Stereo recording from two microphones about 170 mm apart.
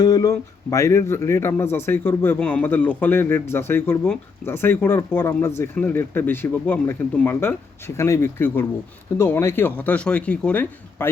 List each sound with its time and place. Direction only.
0.0 s a man's voice: 20° left (ahead or behind)